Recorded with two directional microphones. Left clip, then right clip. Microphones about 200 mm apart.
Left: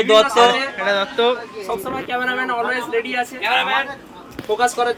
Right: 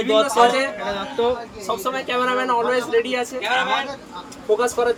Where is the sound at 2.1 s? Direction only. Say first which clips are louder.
Right 1 dB; 15° right (ahead or behind).